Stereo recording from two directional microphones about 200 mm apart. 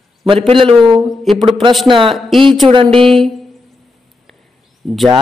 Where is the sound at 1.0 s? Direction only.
Centre (ahead or behind).